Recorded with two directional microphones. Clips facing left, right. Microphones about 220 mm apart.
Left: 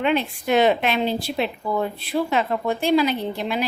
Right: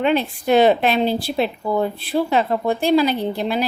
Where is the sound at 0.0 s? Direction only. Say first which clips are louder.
Right 3 dB; 35° right (ahead or behind).